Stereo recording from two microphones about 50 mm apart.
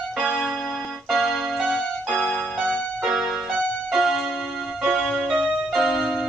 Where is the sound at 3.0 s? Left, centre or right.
Centre.